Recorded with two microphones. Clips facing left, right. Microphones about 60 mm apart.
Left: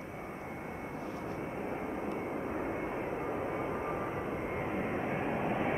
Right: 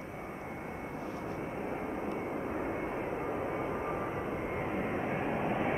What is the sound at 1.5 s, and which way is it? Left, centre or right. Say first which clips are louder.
Vehicle: right 1 dB; right.